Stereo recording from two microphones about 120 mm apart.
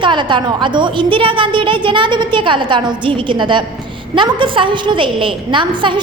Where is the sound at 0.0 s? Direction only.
40° right (ahead or behind).